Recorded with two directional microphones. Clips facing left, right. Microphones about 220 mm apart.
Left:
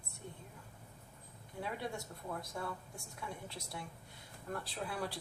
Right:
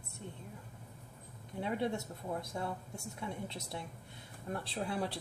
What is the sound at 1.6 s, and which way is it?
Speech, 25° right (ahead or behind).